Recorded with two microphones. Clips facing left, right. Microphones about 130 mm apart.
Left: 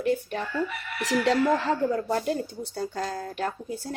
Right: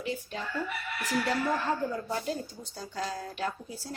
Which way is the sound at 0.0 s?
55° left (ahead or behind).